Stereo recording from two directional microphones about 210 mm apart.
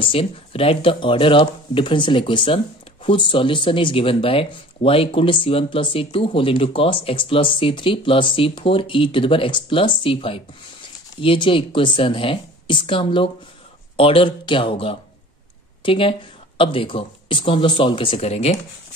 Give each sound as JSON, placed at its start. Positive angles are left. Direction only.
{"t": 0.0, "sound": "speech", "side_deg": 25}